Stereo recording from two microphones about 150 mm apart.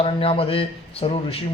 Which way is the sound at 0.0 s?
40° left (ahead or behind).